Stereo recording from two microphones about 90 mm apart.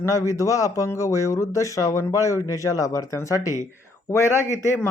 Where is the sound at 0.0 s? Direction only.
35° left (ahead or behind).